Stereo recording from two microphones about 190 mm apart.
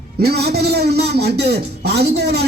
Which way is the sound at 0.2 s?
60° right (ahead or behind).